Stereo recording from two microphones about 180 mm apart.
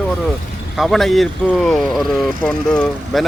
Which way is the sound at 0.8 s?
Centre (ahead or behind).